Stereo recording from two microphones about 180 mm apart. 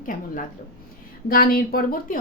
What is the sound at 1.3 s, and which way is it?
Speech, 55° left (ahead or behind).